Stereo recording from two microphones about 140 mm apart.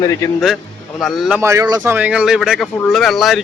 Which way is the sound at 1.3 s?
20° right (ahead or behind).